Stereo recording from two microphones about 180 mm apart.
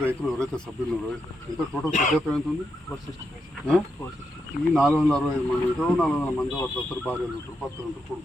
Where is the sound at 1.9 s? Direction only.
45° left (ahead or behind).